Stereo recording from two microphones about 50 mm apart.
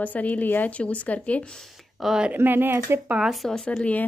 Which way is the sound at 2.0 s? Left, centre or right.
Centre.